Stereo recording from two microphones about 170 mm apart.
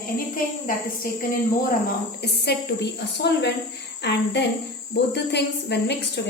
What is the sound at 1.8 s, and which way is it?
A woman's voice, 70° left (ahead or behind).